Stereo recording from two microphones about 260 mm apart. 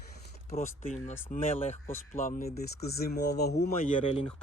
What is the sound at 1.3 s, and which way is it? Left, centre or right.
Speech, left.